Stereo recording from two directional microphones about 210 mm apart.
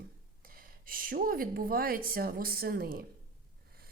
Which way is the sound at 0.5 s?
45° right (ahead or behind).